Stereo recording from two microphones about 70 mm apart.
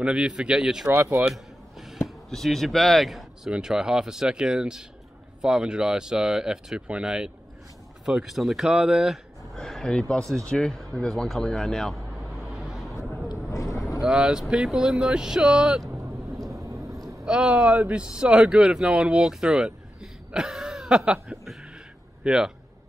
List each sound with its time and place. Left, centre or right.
0.0 s speech: centre
1.2 s a sound: centre
2.2 s speech: centre
9.6 s speech: centre
11.0 s vehicle: centre
13.5 s vehicle: left
14.0 s speech: centre
16.0 s vehicle: right
17.2 s a man's voice: centre